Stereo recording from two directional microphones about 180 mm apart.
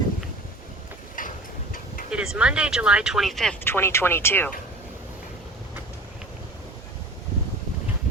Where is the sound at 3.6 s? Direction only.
15° left (ahead or behind).